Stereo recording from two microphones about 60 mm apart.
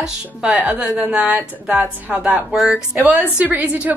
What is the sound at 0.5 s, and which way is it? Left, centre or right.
A woman's voice, right.